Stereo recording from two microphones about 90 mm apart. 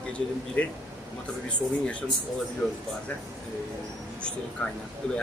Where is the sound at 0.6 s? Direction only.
15° left (ahead or behind).